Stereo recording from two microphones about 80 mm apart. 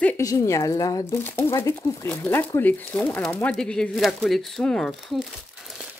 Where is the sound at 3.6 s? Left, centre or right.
Centre.